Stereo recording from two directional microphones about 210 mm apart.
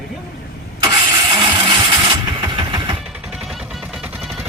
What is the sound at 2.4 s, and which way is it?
Vehicle, 20° right (ahead or behind).